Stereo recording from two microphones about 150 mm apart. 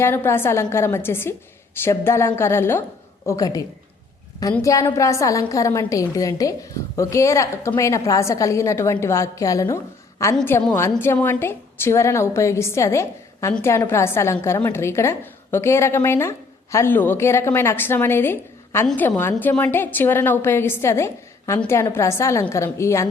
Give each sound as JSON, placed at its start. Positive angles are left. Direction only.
{"t": 0.0, "sound": "a woman's voice", "side_deg": 15}
{"t": 4.6, "sound": "a woman's voice", "side_deg": 20}